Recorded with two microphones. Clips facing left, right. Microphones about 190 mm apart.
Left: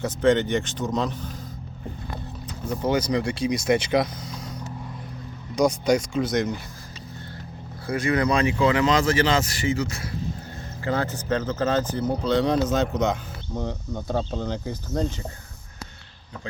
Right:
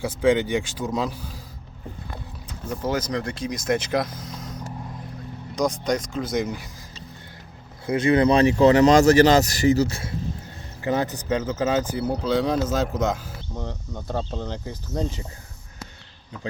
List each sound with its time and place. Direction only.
0.0 s speech: 10° right (ahead or behind)
2.6 s speech: 5° right (ahead or behind)
7.9 s speech: 25° right (ahead or behind)
10.8 s speech: 15° right (ahead or behind); by 15.0 s centre (ahead or behind)